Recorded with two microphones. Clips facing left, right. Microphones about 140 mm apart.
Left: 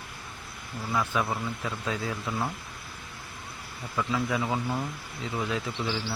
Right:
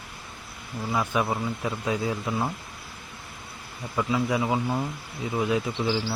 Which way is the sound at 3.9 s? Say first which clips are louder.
Right 3 dB; 15° right (ahead or behind).